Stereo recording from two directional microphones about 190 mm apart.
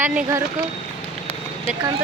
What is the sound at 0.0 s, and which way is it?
Speech, 10° right (ahead or behind).